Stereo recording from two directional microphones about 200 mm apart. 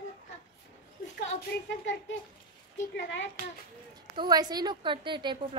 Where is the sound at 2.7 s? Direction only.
65° left (ahead or behind).